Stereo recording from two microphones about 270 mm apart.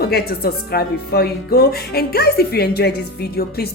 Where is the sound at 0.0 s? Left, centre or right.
Left.